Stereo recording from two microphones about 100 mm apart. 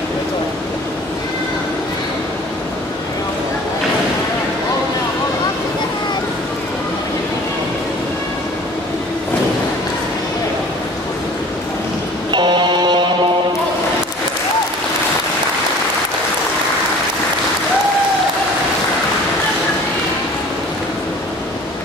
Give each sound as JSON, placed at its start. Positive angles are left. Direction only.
{"t": 12.3, "sound": "music", "side_deg": -50}